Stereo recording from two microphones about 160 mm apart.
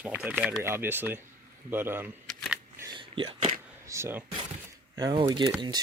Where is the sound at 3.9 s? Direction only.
15° right (ahead or behind).